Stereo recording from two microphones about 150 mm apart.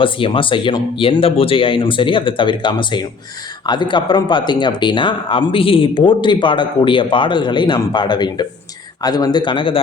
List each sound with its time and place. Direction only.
0.0 s speech: 35° left (ahead or behind)